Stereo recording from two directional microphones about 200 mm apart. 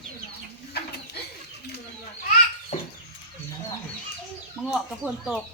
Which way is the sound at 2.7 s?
35° left (ahead or behind).